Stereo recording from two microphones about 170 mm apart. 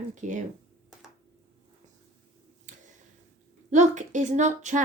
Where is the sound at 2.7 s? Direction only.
45° right (ahead or behind).